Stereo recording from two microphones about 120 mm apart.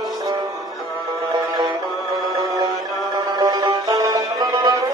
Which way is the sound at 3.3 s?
35° right (ahead or behind).